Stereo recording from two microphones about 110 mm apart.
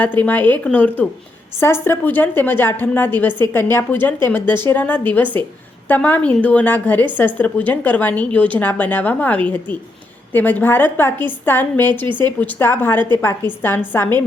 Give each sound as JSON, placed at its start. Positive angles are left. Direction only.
{"t": 0.0, "sound": "a woman's voice", "side_deg": 15}
{"t": 1.5, "sound": "a woman's voice", "side_deg": 20}